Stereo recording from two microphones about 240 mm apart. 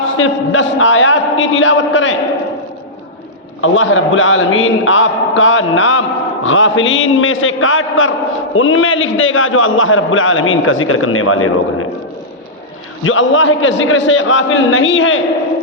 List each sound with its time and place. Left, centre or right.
0.0 s a man's voice: left
3.6 s a man's voice: left
13.1 s a man's voice: left